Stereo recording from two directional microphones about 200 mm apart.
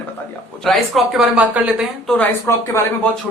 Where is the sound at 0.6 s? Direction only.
Centre (ahead or behind).